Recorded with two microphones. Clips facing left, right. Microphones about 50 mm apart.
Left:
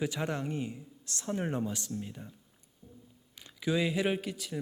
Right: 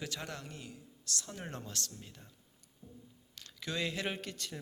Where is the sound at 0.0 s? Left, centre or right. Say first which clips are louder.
Left 9 dB; centre.